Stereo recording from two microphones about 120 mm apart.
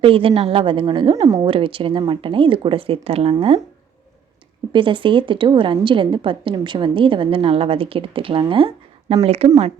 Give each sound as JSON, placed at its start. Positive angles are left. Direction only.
{"t": 0.0, "sound": "a woman's voice", "side_deg": -50}
{"t": 1.1, "sound": "a woman's voice", "side_deg": -30}
{"t": 1.5, "sound": "a woman's voice", "side_deg": -50}
{"t": 4.7, "sound": "a woman's voice", "side_deg": -45}